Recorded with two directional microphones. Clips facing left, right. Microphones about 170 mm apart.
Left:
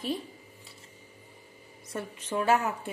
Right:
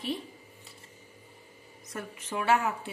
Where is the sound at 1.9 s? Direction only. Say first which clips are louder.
Left 3 dB; 35° left (ahead or behind).